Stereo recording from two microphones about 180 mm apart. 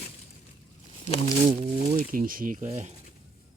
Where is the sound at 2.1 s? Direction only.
50° right (ahead or behind).